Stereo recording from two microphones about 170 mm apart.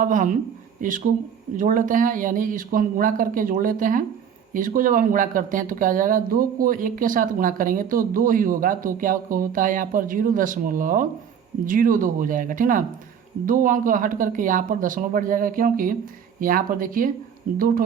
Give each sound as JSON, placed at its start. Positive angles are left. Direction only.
{"t": 0.0, "sound": "speech", "side_deg": -50}